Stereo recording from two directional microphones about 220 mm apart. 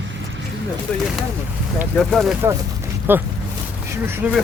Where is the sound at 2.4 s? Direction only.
10° right (ahead or behind).